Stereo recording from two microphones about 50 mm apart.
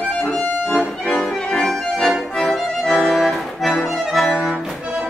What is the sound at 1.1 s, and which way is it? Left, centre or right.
Accordion, centre.